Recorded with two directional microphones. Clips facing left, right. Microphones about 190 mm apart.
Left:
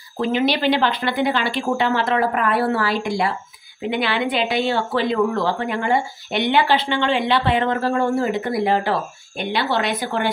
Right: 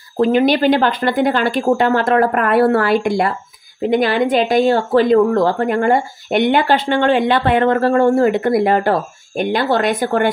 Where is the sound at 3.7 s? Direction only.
40° right (ahead or behind).